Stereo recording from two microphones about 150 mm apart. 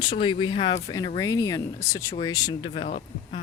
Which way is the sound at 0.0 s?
30° left (ahead or behind).